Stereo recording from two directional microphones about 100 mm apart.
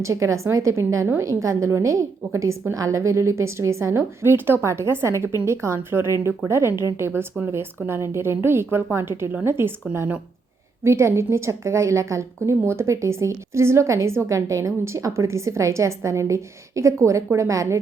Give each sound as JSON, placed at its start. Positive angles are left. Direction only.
{"t": 0.0, "sound": "a woman's voice", "side_deg": -30}